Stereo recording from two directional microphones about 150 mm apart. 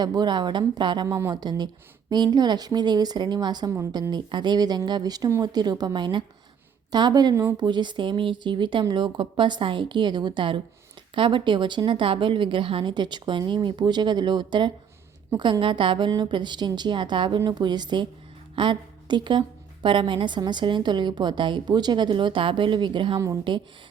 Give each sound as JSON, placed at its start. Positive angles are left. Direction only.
{"t": 0.0, "sound": "speech", "side_deg": -30}
{"t": 1.0, "sound": "a woman's voice", "side_deg": -20}